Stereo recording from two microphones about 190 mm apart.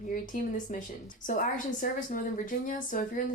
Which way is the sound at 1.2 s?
45° left (ahead or behind).